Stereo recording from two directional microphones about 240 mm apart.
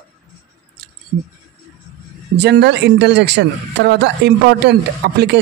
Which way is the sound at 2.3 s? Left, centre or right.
Right.